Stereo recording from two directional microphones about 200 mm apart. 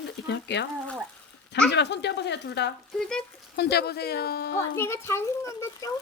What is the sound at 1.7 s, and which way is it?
Speech, 60° left (ahead or behind).